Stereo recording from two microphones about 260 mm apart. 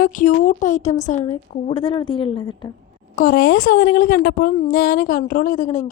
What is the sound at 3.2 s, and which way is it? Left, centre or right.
A woman's voice, left.